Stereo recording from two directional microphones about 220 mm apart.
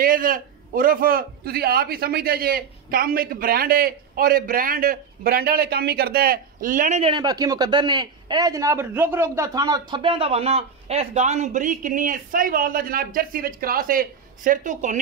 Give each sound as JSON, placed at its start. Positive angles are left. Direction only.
{"t": 0.0, "sound": "a man's voice", "side_deg": -40}